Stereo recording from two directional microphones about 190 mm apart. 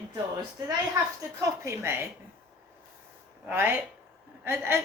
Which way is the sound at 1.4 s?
15° right (ahead or behind).